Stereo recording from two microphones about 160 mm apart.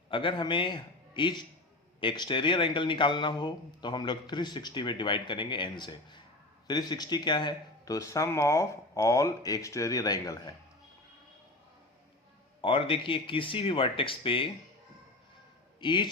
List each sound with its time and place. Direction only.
0.1 s a man's voice: 30° left (ahead or behind)
12.6 s speech: 35° left (ahead or behind)
15.8 s speech: 30° left (ahead or behind)